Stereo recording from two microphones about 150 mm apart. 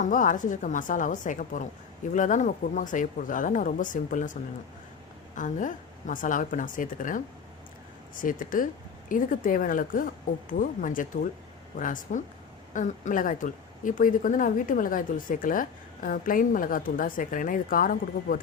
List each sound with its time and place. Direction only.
0.0 s speech: 60° left (ahead or behind)
5.3 s speech: 60° left (ahead or behind)